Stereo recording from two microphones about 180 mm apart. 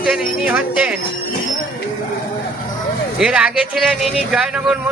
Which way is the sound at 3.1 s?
5° right (ahead or behind).